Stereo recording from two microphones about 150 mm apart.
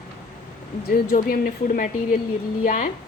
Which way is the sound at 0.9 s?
80° left.